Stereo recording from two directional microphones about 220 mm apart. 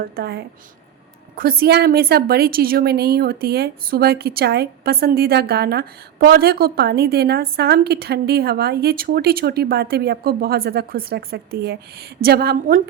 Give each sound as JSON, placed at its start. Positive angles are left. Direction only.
{"t": 0.0, "sound": "a woman's voice", "side_deg": -45}